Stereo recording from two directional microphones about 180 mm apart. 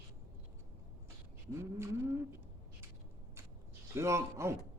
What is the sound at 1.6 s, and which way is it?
Cat, 15° right (ahead or behind).